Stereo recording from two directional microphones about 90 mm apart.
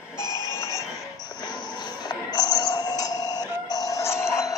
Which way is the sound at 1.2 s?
50° left (ahead or behind).